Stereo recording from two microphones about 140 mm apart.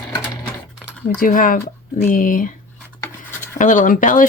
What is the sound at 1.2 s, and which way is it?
Speech, 80° left.